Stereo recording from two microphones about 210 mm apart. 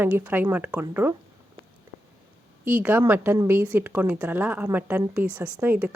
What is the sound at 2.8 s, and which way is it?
A woman's voice, 10° right (ahead or behind).